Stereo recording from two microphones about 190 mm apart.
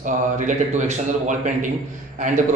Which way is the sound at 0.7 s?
40° right (ahead or behind).